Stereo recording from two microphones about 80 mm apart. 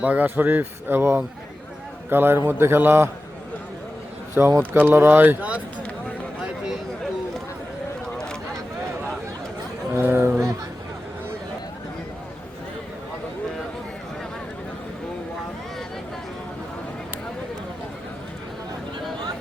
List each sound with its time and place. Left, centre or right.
0.0 s speech: centre
4.4 s speech: right
9.9 s a sound: right